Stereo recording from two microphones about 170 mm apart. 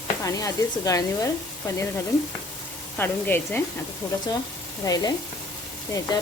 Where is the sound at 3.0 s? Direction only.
10° left (ahead or behind).